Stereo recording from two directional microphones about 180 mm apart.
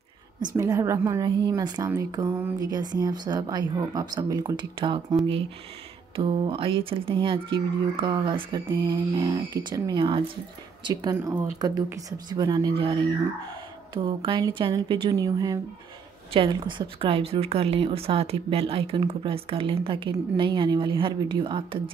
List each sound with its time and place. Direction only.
0.6 s speech: 15° right (ahead or behind)